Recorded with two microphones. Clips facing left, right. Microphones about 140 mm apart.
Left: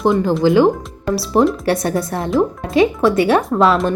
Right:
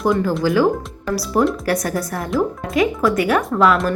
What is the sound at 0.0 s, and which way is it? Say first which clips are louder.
Speech: left 3 dB; 25° left (ahead or behind).